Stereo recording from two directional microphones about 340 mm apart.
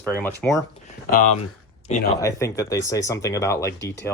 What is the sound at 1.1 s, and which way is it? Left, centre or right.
Speech, left.